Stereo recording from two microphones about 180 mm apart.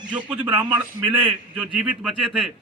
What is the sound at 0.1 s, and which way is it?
Speech, 5° right (ahead or behind).